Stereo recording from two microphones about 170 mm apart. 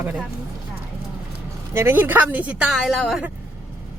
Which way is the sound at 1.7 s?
15° right (ahead or behind).